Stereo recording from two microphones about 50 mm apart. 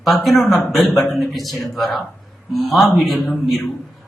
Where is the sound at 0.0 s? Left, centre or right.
Centre.